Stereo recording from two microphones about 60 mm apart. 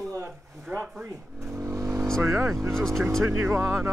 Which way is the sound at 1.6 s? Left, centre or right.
Right.